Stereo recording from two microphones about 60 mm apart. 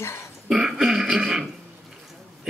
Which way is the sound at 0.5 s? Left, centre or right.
Centre.